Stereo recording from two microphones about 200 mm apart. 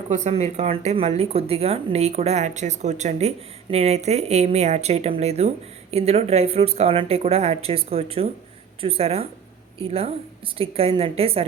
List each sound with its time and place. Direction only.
0.1 s speech: 35° right (ahead or behind)